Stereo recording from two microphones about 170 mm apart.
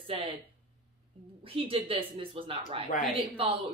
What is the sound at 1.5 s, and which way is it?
Speech, 35° right (ahead or behind).